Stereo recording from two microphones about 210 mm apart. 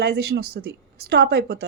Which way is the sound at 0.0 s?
50° right (ahead or behind).